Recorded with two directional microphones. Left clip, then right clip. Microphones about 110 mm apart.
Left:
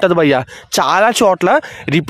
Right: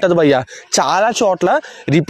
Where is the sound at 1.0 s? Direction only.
50° left (ahead or behind).